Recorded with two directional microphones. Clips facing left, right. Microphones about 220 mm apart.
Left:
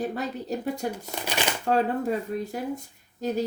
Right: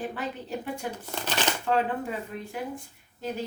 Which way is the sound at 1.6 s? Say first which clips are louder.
Left 5 dB; 40° left (ahead or behind).